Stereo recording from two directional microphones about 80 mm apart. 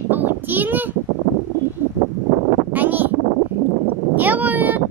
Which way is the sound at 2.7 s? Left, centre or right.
Right.